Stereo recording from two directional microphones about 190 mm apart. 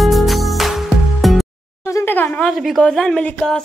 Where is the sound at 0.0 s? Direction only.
Centre (ahead or behind).